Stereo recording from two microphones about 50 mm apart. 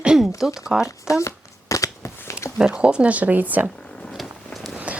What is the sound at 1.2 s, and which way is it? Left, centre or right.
Shuffling cards, left.